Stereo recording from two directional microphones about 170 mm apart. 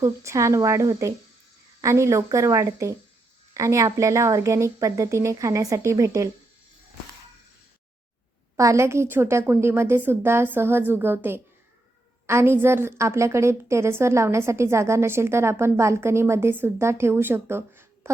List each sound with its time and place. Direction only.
0.0 s a woman's voice: 20° right (ahead or behind)
8.5 s a woman's voice: 15° right (ahead or behind)